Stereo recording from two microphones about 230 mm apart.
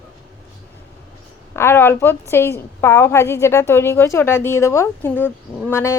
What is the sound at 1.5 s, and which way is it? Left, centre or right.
A woman's voice, centre.